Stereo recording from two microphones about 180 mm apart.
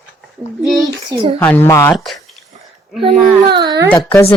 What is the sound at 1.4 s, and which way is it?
Speech, 10° left (ahead or behind).